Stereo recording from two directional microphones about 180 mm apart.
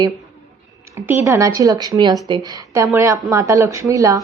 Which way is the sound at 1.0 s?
15° right (ahead or behind).